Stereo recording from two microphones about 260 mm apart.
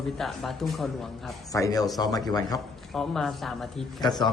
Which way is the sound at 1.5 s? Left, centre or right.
Centre.